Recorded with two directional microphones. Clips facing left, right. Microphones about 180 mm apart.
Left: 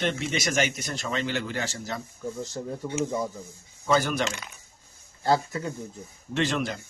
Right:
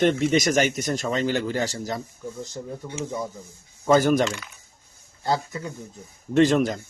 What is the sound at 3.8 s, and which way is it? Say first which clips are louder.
Speech: right 6 dB; 45° right (ahead or behind).